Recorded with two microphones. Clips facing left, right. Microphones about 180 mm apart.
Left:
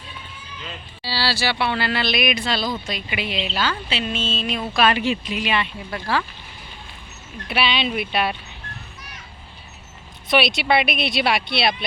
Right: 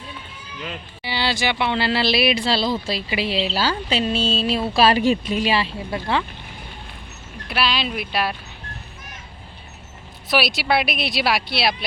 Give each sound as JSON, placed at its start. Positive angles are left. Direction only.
{"t": 1.0, "sound": "a woman's voice", "side_deg": -20}
{"t": 7.4, "sound": "speech", "side_deg": 0}
{"t": 10.2, "sound": "speech", "side_deg": 0}